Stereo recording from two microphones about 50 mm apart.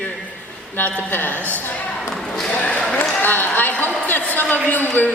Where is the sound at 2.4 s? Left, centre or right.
Left.